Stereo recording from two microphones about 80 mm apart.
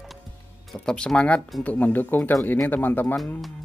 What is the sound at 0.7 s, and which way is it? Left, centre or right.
Speech, centre.